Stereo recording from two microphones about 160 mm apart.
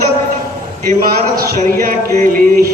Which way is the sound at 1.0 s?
65° right (ahead or behind).